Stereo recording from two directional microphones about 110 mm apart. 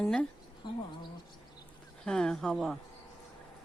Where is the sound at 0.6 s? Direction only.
45° left (ahead or behind).